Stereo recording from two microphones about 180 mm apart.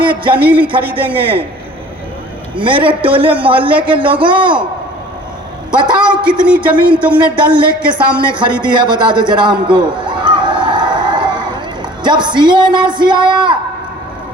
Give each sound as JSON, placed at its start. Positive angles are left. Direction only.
{"t": 0.3, "sound": "a woman's voice", "side_deg": -10}
{"t": 2.6, "sound": "a man's voice", "side_deg": -25}
{"t": 6.0, "sound": "a woman's voice", "side_deg": -5}
{"t": 7.2, "sound": "a man's voice", "side_deg": -25}
{"t": 7.5, "sound": "a woman's voice", "side_deg": -5}
{"t": 8.7, "sound": "a sound", "side_deg": -25}
{"t": 12.0, "sound": "a man's voice", "side_deg": -25}